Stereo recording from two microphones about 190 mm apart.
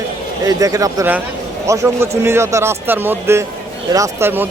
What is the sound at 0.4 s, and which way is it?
Speech, 15° right (ahead or behind).